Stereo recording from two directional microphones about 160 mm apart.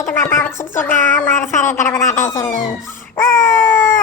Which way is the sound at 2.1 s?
50° left (ahead or behind).